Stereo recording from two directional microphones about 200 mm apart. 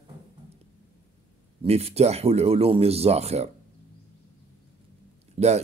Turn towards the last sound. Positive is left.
turn(degrees=-35)  # may be behind; listen again after turning